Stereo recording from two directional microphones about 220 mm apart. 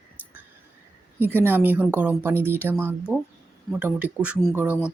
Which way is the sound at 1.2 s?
10° right (ahead or behind).